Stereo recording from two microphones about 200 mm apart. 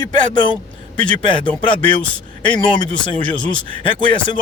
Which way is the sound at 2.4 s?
25° left (ahead or behind).